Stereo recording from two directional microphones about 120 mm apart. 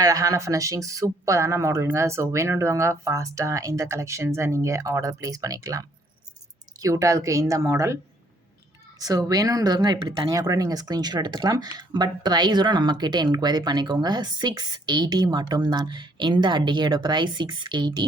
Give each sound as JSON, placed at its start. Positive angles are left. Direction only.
{"t": 0.0, "sound": "speech", "side_deg": -30}
{"t": 9.0, "sound": "speech", "side_deg": -30}